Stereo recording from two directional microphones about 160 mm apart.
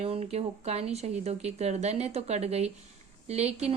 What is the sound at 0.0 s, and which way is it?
A woman's voice, 40° right (ahead or behind).